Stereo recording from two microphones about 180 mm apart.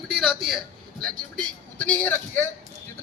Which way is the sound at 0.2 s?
Centre (ahead or behind).